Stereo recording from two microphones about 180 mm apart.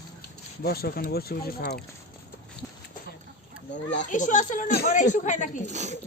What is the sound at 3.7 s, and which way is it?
Speech, 80° left.